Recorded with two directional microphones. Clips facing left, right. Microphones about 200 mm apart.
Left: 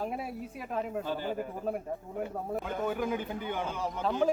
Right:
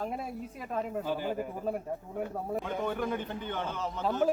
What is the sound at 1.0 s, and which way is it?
A man's voice, 10° right (ahead or behind).